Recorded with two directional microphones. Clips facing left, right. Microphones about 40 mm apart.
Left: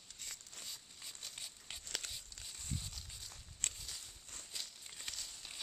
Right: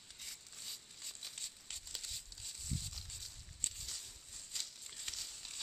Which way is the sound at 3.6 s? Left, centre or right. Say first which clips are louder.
Left 3 dB; left.